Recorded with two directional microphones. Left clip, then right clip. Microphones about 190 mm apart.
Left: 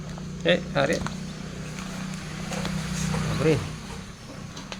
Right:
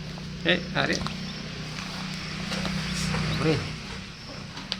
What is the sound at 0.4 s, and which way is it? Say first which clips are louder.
Speech: left 2 dB; 40° left (ahead or behind).